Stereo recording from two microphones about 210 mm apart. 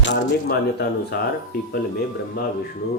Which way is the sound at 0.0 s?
55° left (ahead or behind).